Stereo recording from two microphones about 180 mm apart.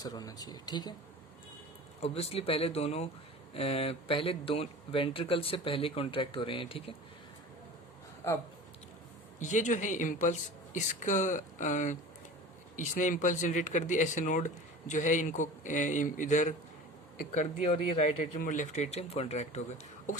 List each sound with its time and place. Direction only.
0.0 s speech: 20° left (ahead or behind)
2.0 s speech: 35° left (ahead or behind)
9.4 s speech: 45° left (ahead or behind)